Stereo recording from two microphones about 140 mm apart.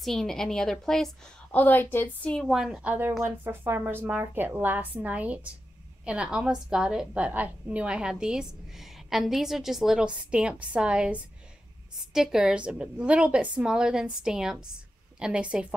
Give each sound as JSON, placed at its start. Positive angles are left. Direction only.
{"t": 0.0, "sound": "a woman's voice", "side_deg": 5}
{"t": 2.5, "sound": "a woman's voice", "side_deg": -5}